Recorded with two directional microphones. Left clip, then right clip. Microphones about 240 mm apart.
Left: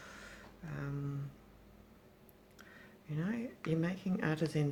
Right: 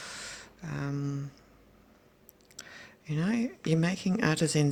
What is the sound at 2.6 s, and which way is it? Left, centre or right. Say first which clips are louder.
Speech: right 10 dB; right.